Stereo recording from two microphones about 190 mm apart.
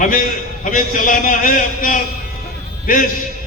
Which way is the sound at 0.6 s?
45° left (ahead or behind).